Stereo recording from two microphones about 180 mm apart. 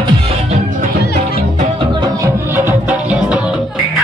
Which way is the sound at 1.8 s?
25° right (ahead or behind).